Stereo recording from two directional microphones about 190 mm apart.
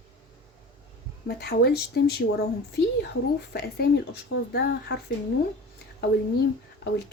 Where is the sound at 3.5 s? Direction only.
55° left (ahead or behind).